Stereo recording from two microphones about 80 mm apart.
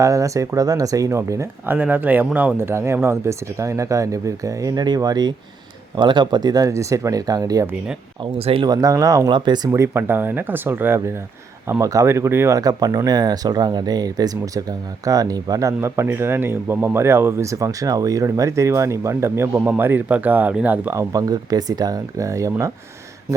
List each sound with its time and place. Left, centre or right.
0.0 s speech: right
1.6 s speech: right
2.6 s speech: right
6.0 s speech: right
6.7 s speech: right
8.2 s speech: right
11.8 s speech: right
12.0 s speech: right
12.5 s speech: right; by 20.9 s centre
20.9 s speech: right